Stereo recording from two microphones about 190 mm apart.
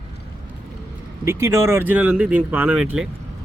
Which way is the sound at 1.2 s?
15° right (ahead or behind).